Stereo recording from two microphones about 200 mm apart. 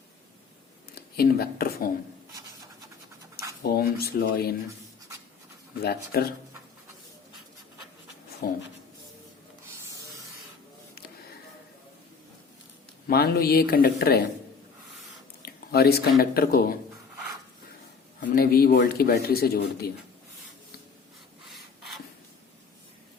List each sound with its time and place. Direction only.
1.1 s speech: 50° left (ahead or behind)
3.6 s speech: 50° left (ahead or behind)
5.8 s speech: 50° left (ahead or behind)
8.4 s speech: 45° left (ahead or behind)
13.1 s speech: 50° left (ahead or behind)
15.4 s speech: 50° left (ahead or behind)
18.2 s speech: 50° left (ahead or behind)